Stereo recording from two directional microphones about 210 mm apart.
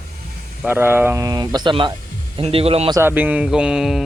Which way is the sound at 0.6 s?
10° right (ahead or behind).